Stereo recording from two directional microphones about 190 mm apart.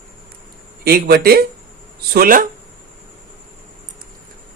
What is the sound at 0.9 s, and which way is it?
Speech, 55° right (ahead or behind).